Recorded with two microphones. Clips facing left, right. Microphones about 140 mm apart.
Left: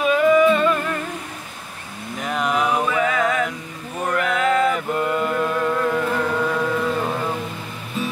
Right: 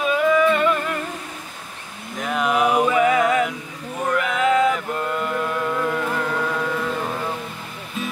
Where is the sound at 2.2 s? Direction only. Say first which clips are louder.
Right 2 dB; centre (ahead or behind).